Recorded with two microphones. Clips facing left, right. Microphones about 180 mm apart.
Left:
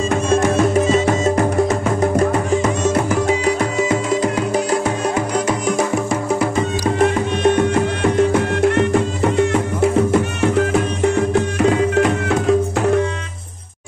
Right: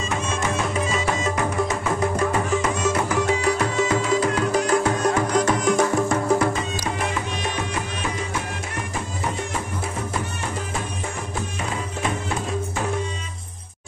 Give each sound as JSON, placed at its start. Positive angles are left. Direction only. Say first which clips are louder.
{"t": 0.1, "sound": "music", "louder": "left 9 dB", "side_deg": 45}
{"t": 7.0, "sound": "music", "louder": "left 11 dB", "side_deg": 60}
{"t": 11.3, "sound": "music", "louder": "left 13 dB", "side_deg": 75}